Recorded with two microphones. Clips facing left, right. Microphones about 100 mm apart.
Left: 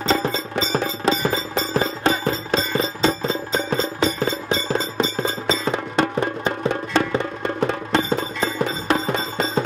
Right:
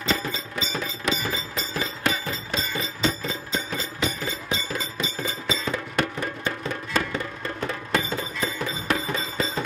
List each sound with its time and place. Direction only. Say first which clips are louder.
0.0 s music: left 7 dB; 30° left (ahead or behind)